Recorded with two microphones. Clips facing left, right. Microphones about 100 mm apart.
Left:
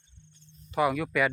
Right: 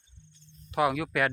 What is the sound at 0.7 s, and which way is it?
Speech, centre (ahead or behind).